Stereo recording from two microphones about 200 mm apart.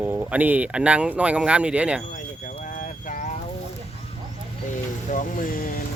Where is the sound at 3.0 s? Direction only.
40° left (ahead or behind).